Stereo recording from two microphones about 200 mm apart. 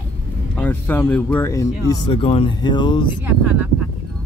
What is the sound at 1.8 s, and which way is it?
Speech, 25° left (ahead or behind).